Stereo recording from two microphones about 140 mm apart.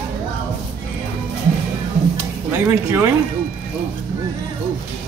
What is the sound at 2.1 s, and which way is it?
Music, 15° right (ahead or behind).